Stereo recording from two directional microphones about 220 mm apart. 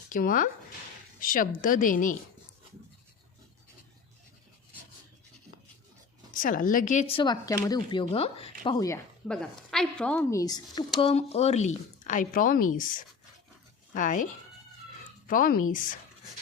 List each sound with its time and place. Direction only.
0.1 s a woman's voice: 40° left (ahead or behind)
6.3 s speech: 35° left (ahead or behind); by 9.0 s 15° left (ahead or behind)
9.2 s a woman's voice: 5° left (ahead or behind)
11.0 s a woman's voice: 30° left (ahead or behind)
15.3 s a woman's voice: 40° left (ahead or behind)